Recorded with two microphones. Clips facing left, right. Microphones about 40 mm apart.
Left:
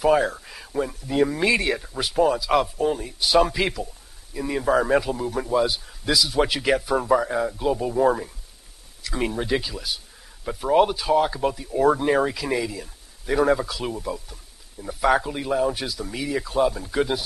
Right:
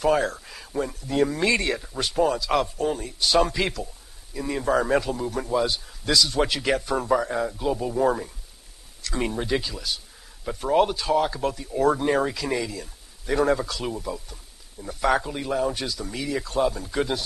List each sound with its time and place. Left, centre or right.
0.0 s speech: centre